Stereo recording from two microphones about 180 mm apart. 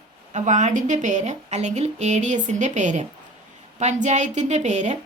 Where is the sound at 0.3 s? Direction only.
40° right (ahead or behind).